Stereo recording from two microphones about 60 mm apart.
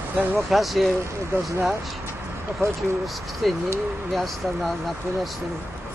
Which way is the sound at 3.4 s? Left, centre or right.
Centre.